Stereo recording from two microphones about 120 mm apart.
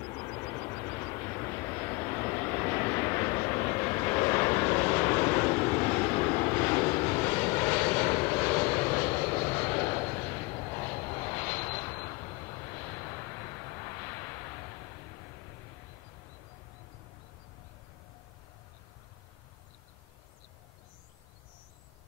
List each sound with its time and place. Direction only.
0.0 s vehicle: 25° left (ahead or behind)